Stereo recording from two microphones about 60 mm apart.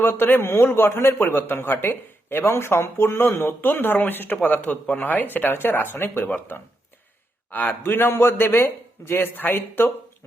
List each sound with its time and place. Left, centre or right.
0.0 s a man's voice: left
7.5 s a man's voice: left